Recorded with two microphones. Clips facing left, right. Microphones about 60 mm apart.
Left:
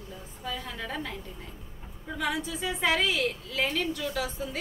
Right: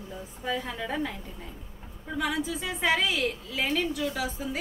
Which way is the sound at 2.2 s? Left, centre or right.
Centre.